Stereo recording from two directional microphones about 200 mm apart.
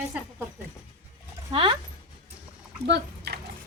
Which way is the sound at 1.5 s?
25° right (ahead or behind).